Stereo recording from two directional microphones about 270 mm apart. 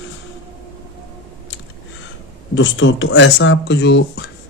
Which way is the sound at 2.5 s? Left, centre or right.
Left.